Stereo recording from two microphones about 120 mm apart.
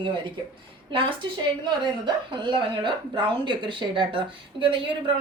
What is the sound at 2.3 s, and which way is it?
Speech, 40° right (ahead or behind).